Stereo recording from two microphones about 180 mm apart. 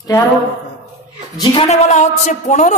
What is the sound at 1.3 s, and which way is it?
Speech, 30° left (ahead or behind).